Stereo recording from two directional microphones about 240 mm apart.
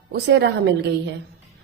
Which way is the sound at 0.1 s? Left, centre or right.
Right.